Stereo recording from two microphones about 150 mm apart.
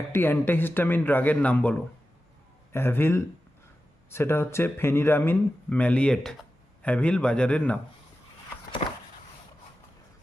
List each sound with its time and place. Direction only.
0.1 s speech: 15° left (ahead or behind)
2.7 s speech: 15° left (ahead or behind)